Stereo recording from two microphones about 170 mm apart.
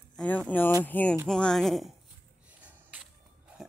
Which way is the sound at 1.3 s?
5° left (ahead or behind).